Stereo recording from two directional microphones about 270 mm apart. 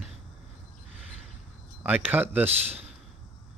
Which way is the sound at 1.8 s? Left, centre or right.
Centre.